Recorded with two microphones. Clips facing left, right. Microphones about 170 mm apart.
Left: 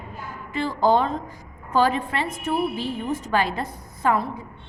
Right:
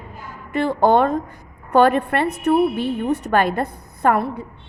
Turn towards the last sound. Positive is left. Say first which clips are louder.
# right 4 dB
turn(degrees=-60)  # may be behind; listen again after turning